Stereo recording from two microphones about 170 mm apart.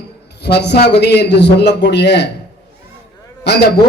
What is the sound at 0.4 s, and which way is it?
A man's voice, 80° left.